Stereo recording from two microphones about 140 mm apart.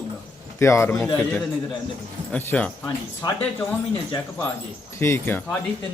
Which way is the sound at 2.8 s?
25° left (ahead or behind).